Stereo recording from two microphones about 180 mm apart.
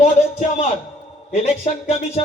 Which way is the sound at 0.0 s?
40° left (ahead or behind).